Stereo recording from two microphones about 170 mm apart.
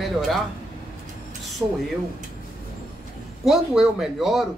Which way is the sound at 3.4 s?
Centre (ahead or behind).